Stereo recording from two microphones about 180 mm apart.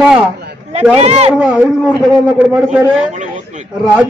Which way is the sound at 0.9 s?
35° right (ahead or behind).